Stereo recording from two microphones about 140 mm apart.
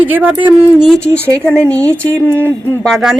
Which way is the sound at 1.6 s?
10° left (ahead or behind).